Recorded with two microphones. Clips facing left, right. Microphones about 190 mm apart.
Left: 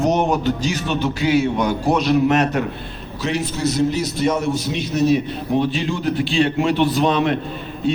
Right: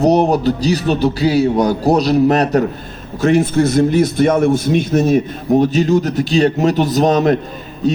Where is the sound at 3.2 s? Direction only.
50° right (ahead or behind).